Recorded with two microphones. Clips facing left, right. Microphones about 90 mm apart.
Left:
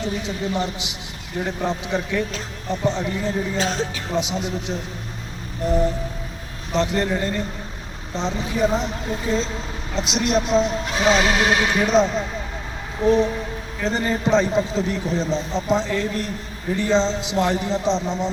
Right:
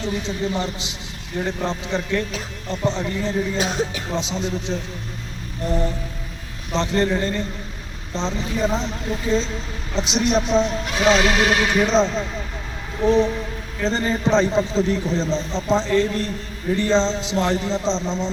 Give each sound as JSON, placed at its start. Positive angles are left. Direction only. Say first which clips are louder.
{"t": 0.0, "sound": "a man's voice", "louder": "right 1 dB", "side_deg": 15}
{"t": 3.6, "sound": "speech", "louder": "right 1 dB", "side_deg": -15}
{"t": 4.1, "sound": "a man's voice", "louder": "left 1 dB", "side_deg": 10}